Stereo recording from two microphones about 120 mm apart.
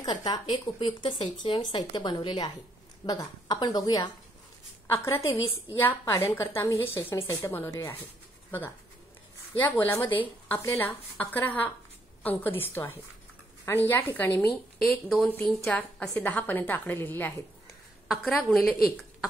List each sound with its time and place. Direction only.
0.0 s speech: 40° left (ahead or behind)
4.9 s a woman's voice: 20° left (ahead or behind)
14.5 s a woman's voice: centre (ahead or behind); by 17.3 s 15° left (ahead or behind)
18.0 s a woman's voice: centre (ahead or behind)